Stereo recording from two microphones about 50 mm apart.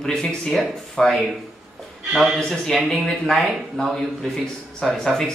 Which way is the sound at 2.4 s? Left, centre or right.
Centre.